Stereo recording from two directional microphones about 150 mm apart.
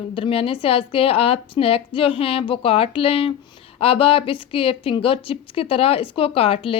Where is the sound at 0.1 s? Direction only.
40° left (ahead or behind).